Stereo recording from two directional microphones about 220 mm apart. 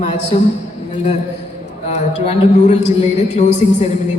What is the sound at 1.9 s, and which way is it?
A woman's voice, 30° left (ahead or behind).